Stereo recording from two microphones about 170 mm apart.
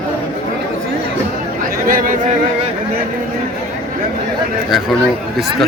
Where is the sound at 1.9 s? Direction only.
55° right (ahead or behind).